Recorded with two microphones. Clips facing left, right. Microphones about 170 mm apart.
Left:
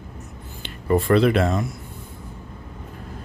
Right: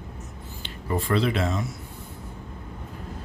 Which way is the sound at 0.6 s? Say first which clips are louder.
Left 8 dB; 55° left (ahead or behind).